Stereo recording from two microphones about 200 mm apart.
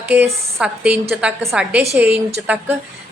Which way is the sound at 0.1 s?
10° right (ahead or behind).